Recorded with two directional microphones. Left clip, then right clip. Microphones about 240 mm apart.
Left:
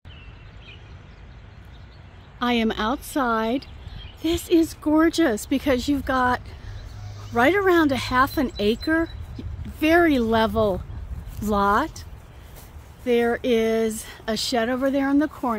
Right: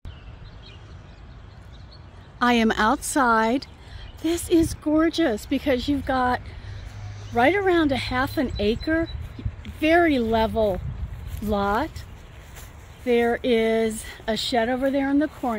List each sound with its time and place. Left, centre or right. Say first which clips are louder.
2.3 s a woman's voice: right 3 dB; centre
9.4 s a sound: left 2 dB; centre
9.8 s speech: left 1 dB; centre
13.0 s speech: even; centre